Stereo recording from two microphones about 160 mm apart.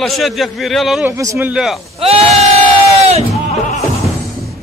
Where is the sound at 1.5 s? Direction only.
Centre (ahead or behind).